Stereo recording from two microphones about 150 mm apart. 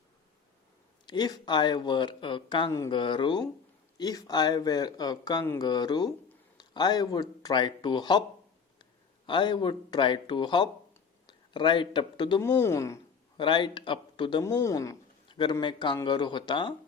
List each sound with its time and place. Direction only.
1.0 s a man's voice: 30° left (ahead or behind)
12.4 s speech: 15° left (ahead or behind)
13.3 s a man's voice: 30° left (ahead or behind)
14.4 s speech: 20° left (ahead or behind)
15.3 s a sound: 30° left (ahead or behind)
15.6 s speech: 30° left (ahead or behind)